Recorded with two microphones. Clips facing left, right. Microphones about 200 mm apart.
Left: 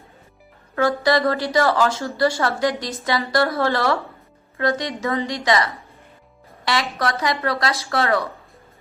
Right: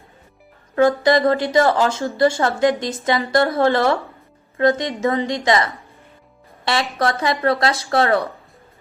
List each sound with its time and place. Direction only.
0.8 s speech: 20° right (ahead or behind)
6.9 s speech: 30° right (ahead or behind)